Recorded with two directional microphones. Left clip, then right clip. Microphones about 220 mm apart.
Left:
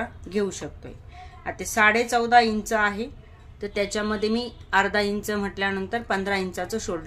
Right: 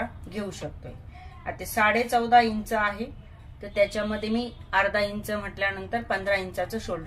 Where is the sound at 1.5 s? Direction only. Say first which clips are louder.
Left 3 dB; 40° left (ahead or behind).